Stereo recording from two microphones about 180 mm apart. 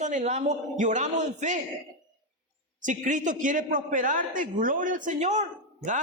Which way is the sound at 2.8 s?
45° right (ahead or behind).